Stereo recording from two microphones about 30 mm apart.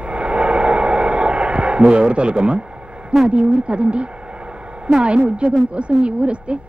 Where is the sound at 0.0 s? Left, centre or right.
Right.